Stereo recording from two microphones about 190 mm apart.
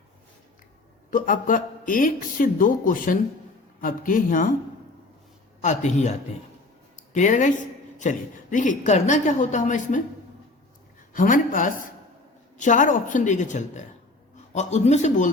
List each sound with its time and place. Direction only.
1.1 s speech: 45° left (ahead or behind)
5.6 s a woman's voice: 40° left (ahead or behind)
11.1 s a woman's voice: 45° left (ahead or behind)